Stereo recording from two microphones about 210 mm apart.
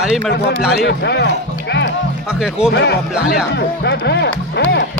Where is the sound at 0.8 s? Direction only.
55° left (ahead or behind).